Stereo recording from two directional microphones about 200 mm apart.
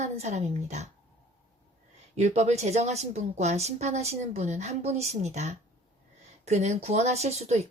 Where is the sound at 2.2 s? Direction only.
35° right (ahead or behind).